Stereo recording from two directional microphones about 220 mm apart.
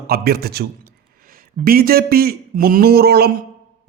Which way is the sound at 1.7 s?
40° right (ahead or behind).